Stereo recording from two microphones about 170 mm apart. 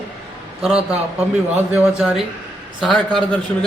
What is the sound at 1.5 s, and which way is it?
A man's voice, 5° right (ahead or behind).